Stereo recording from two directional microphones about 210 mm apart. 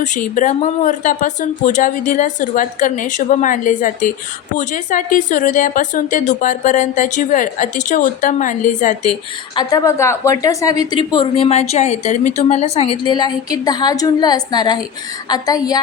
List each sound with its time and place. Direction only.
0.0 s a woman's voice: 35° left (ahead or behind)
9.6 s a woman's voice: 15° left (ahead or behind)